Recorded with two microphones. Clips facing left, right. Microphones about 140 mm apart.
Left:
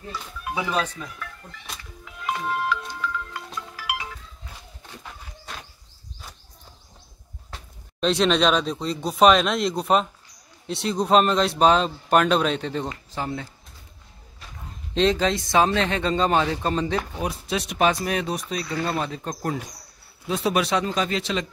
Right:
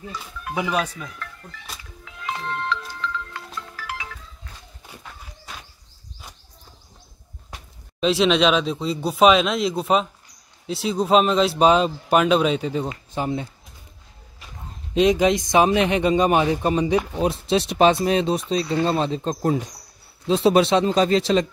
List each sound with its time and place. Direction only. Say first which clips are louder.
0.6 s speech: right 2 dB; 10° right (ahead or behind)
1.2 s music: even; 5° left (ahead or behind)
8.0 s speech: right 2 dB; 5° right (ahead or behind)
12.9 s speech: right 4 dB; 20° right (ahead or behind)
15.0 s speech: right 4 dB; 15° right (ahead or behind)
17.3 s speech: right 7 dB; 30° right (ahead or behind)